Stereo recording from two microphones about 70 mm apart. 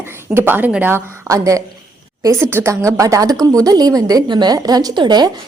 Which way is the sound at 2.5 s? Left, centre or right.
Right.